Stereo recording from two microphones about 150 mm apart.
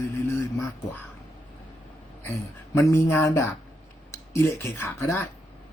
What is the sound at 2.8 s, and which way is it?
Speech, 20° left (ahead or behind).